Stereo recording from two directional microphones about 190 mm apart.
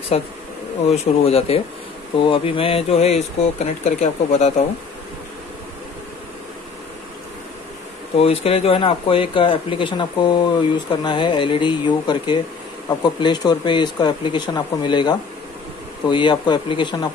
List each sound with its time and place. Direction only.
0.1 s speech: 35° left (ahead or behind)
8.2 s speech: 30° left (ahead or behind)